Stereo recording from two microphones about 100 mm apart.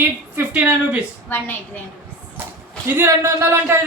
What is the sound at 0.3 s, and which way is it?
Speech, 15° right (ahead or behind).